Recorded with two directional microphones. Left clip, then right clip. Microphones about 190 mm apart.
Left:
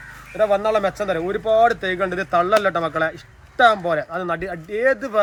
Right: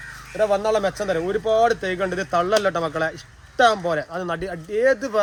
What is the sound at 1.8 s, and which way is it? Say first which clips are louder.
Speech: left 2 dB; 30° right (ahead or behind).